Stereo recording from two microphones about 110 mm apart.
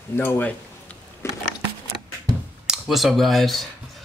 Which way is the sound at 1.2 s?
25° left (ahead or behind).